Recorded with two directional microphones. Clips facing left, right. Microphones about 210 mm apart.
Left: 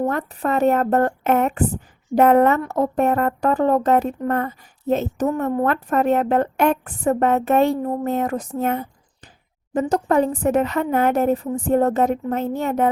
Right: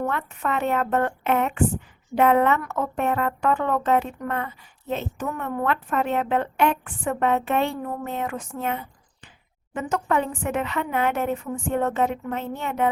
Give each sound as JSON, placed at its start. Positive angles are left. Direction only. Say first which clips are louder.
{"t": 0.0, "sound": "a woman's voice", "louder": "left 5 dB", "side_deg": 40}